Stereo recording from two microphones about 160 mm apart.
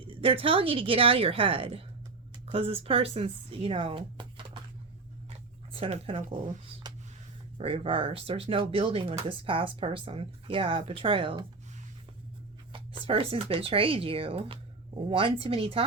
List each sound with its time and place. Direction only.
0.0 s speech: 35° right (ahead or behind)
5.7 s speech: 35° right (ahead or behind)
12.7 s speech: 35° right (ahead or behind)